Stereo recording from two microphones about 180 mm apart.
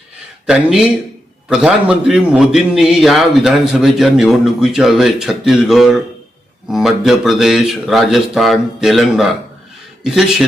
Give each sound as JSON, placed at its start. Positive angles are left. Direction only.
{"t": 0.4, "sound": "a man's voice", "side_deg": -5}